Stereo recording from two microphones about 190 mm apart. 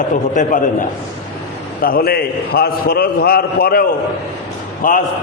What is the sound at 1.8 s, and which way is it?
A man's voice, 50° left (ahead or behind).